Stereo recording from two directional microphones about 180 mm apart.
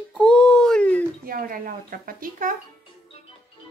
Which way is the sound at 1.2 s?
50° right (ahead or behind).